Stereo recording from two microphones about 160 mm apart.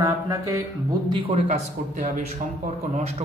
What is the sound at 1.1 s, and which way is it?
A man's voice, 35° right (ahead or behind).